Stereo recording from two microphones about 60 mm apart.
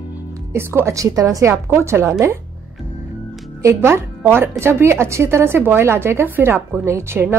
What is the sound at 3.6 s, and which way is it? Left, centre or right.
A woman's voice, right.